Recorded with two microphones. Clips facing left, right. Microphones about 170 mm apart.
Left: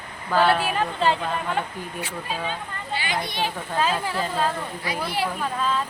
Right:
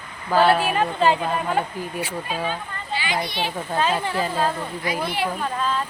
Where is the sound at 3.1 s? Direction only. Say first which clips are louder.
Right 1 dB; 45° left (ahead or behind).